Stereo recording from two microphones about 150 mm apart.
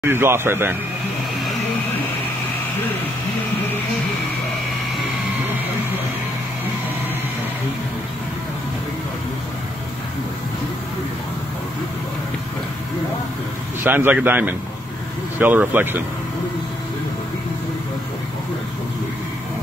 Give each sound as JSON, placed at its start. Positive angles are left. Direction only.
{"t": 0.0, "sound": "a man's voice", "side_deg": -15}
{"t": 13.8, "sound": "a man's voice", "side_deg": -15}